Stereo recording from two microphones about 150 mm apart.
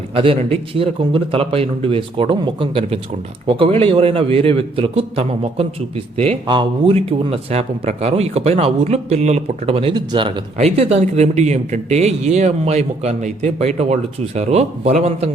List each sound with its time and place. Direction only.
0.1 s a man's voice: 40° right (ahead or behind)